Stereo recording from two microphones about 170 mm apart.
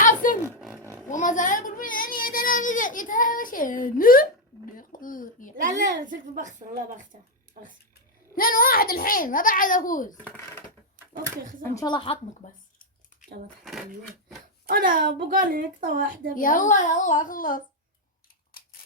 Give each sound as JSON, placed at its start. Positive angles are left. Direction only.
{"t": 0.0, "sound": "roar", "side_deg": 50}
{"t": 0.8, "sound": "roaring cats", "side_deg": -15}
{"t": 1.1, "sound": "a sound", "side_deg": 50}
{"t": 5.5, "sound": "a woman's voice", "side_deg": -50}
{"t": 8.4, "sound": "a child's voice", "side_deg": 55}
{"t": 10.2, "sound": "speech", "side_deg": 15}
{"t": 10.9, "sound": "speech", "side_deg": -55}
{"t": 11.7, "sound": "speech", "side_deg": 25}
{"t": 12.4, "sound": "a child's voice", "side_deg": 50}
{"t": 13.2, "sound": "a sound", "side_deg": 50}
{"t": 14.7, "sound": "a woman's voice", "side_deg": -60}
{"t": 16.3, "sound": "a child's voice", "side_deg": 50}